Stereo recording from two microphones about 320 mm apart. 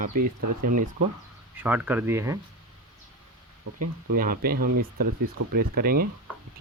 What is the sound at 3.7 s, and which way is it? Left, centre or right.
Speech, right.